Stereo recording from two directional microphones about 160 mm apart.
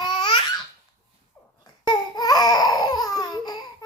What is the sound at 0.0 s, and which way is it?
Laughter, 30° left (ahead or behind).